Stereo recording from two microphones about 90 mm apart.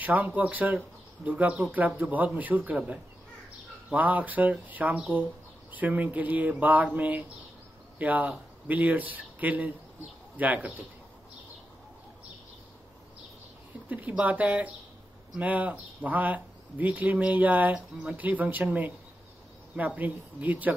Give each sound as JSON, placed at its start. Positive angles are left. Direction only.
{"t": 0.0, "sound": "speech", "side_deg": -20}
{"t": 13.8, "sound": "speech", "side_deg": -20}